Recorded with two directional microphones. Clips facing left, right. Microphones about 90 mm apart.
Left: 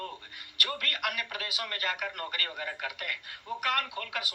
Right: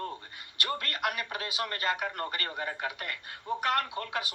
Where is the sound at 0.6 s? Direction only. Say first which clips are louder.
Right 2 dB; 25° right (ahead or behind).